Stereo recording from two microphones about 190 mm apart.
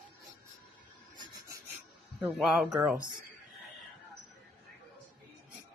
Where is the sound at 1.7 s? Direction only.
10° right (ahead or behind).